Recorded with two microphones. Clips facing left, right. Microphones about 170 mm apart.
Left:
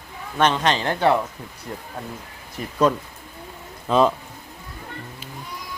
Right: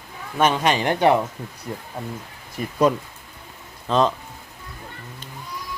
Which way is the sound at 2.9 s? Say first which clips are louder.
Right 1 dB; 10° right (ahead or behind).